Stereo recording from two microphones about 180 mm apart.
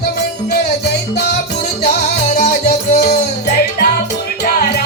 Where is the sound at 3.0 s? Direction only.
55° left (ahead or behind).